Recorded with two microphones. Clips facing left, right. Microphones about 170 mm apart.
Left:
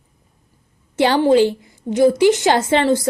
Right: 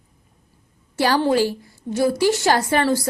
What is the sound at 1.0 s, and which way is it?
A woman's voice, 20° left (ahead or behind).